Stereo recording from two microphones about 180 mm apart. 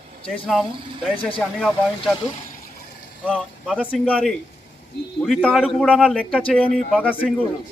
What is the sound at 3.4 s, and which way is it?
Speech, 5° right (ahead or behind).